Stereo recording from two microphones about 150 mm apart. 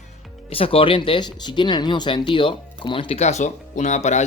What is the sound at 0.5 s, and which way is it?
Speech, 35° left (ahead or behind).